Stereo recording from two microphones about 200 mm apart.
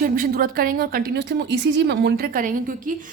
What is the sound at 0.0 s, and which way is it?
A woman's voice, 45° right (ahead or behind).